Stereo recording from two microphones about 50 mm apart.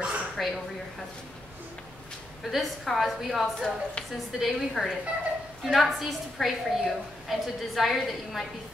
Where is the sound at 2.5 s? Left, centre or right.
Centre.